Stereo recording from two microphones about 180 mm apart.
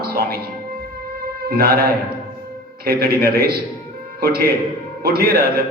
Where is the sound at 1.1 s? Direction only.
60° right (ahead or behind).